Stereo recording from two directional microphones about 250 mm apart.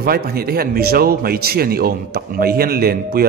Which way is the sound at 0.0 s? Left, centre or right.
Right.